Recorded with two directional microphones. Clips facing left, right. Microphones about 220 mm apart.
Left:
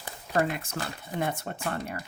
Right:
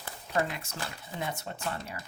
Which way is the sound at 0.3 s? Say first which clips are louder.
Left 4 dB; 55° left (ahead or behind).